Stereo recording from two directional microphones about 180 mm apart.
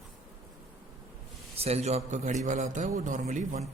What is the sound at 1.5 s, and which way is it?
A man's voice, 35° right (ahead or behind).